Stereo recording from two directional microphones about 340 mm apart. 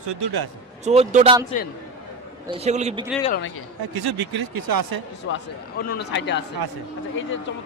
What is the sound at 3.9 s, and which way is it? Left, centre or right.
Speech, right.